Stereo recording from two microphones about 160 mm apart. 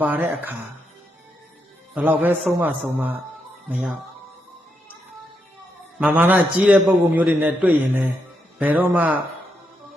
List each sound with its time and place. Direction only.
0.0 s a man's voice: 10° right (ahead or behind)
2.0 s a man's voice: 10° right (ahead or behind)
6.0 s a man's voice: 10° right (ahead or behind)